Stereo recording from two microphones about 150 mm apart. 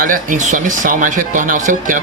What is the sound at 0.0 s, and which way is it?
Speech, 65° right (ahead or behind).